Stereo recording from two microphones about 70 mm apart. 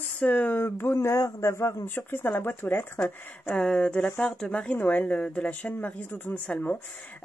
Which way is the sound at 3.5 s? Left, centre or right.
Centre.